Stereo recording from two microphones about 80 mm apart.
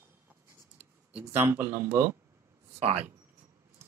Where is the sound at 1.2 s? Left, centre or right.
Right.